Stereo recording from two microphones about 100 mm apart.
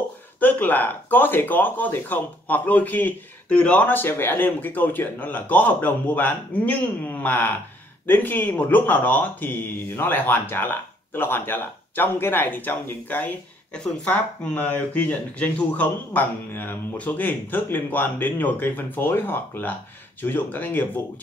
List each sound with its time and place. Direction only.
0.4 s speech: 20° left (ahead or behind)